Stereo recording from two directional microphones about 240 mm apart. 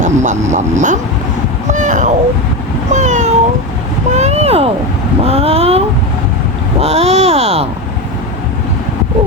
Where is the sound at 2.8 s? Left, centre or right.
Right.